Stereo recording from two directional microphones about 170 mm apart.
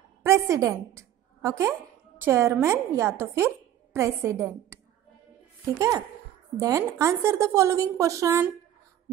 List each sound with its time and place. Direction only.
0.2 s a woman's voice: 20° right (ahead or behind)
5.8 s a woman's voice: 20° right (ahead or behind)